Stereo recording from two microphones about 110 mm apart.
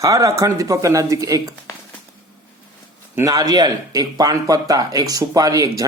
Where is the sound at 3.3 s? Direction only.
35° right (ahead or behind).